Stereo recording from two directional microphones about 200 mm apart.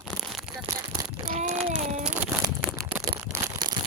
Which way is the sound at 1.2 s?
40° right (ahead or behind).